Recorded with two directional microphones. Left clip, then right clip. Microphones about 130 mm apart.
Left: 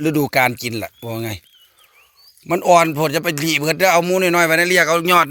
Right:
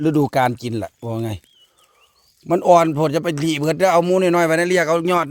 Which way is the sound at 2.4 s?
30° right (ahead or behind).